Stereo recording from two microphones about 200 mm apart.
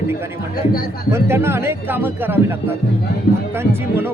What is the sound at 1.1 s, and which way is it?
A man's voice, 10° right (ahead or behind).